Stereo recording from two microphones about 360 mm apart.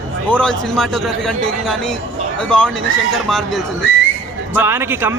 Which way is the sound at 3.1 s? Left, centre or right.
Centre.